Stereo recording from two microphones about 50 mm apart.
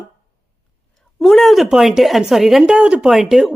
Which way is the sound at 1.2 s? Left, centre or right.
Centre.